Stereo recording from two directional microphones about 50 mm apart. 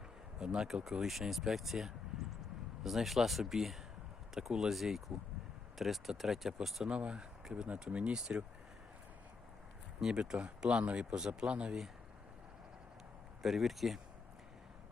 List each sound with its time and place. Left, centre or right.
0.3 s speech: centre
6.8 s speech: centre
10.0 s speech: centre
13.4 s speech: centre